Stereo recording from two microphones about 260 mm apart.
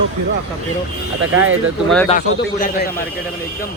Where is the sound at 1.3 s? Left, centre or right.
Right.